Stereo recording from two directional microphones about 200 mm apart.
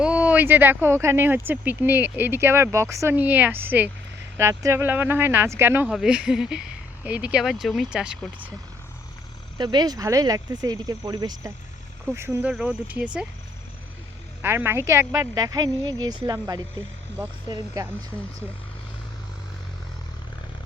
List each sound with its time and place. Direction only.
0.0 s speech: 5° right (ahead or behind)
9.6 s speech: 20° right (ahead or behind)
14.4 s speech: 10° right (ahead or behind)